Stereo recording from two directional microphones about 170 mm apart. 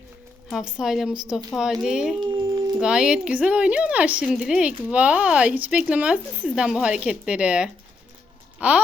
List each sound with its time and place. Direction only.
0.5 s speech: 5° right (ahead or behind)
2.2 s a sound: 25° right (ahead or behind)
2.8 s speech: 5° right (ahead or behind)